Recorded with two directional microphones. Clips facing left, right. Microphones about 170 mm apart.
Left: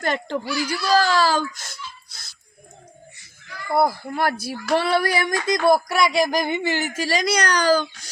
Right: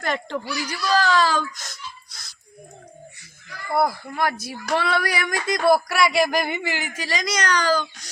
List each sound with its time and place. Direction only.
0.0 s a child's voice: 30° left (ahead or behind)
3.8 s speech: 25° left (ahead or behind)
4.7 s a sound: 30° left (ahead or behind)
6.8 s speech: 5° left (ahead or behind)
7.1 s speech: 35° left (ahead or behind)